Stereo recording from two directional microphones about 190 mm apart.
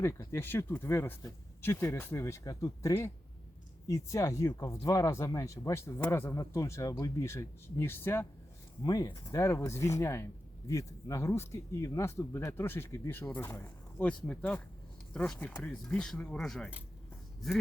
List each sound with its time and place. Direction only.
0.0 s speech: 15° left (ahead or behind)